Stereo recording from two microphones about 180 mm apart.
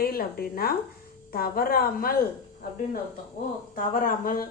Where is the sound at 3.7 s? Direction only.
50° left (ahead or behind).